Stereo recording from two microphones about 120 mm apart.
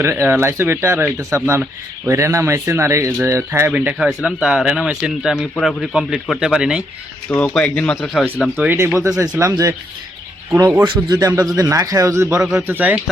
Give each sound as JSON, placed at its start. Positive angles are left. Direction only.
{"t": 0.0, "sound": "speech", "side_deg": -20}
{"t": 3.7, "sound": "speech", "side_deg": -10}
{"t": 7.3, "sound": "speech", "side_deg": 15}
{"t": 8.5, "sound": "speech", "side_deg": -15}
{"t": 10.8, "sound": "a man's voice", "side_deg": -35}